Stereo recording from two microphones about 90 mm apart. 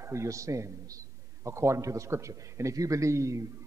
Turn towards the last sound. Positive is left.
turn(degrees=-35)  # may be behind; listen again after turning